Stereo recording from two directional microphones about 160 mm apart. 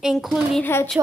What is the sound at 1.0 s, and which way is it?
Speech, 15° right (ahead or behind).